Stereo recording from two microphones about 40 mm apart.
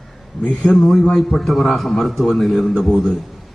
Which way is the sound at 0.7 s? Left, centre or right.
Centre.